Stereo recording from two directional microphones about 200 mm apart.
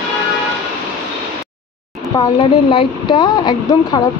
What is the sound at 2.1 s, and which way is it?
A woman's voice, 25° left (ahead or behind).